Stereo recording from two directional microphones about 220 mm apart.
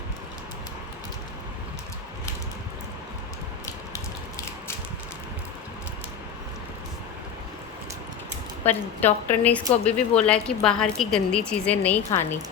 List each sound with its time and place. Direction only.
8.6 s a woman's voice: 10° left (ahead or behind)